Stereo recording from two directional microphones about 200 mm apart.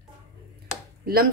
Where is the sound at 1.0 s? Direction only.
50° right (ahead or behind).